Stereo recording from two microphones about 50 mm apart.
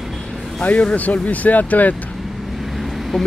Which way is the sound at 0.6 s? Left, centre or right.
Left.